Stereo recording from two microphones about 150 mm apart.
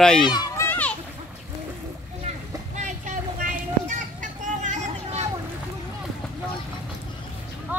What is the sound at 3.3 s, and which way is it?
Children playing, 60° right (ahead or behind).